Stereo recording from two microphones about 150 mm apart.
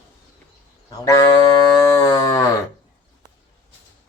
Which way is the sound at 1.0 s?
20° left (ahead or behind).